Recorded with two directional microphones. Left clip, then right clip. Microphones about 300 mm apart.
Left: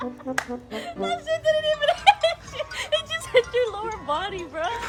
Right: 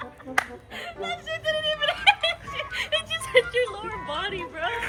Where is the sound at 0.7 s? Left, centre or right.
Left.